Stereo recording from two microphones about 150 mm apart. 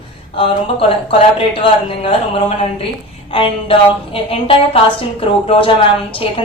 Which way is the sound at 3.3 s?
35° left (ahead or behind).